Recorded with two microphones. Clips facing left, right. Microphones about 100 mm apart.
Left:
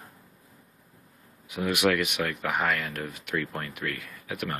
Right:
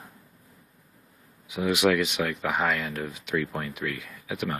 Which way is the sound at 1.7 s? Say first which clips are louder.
Right 2 dB; 15° right (ahead or behind).